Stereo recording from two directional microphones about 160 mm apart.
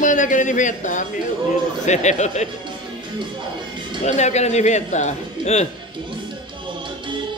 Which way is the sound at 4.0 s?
45° left (ahead or behind).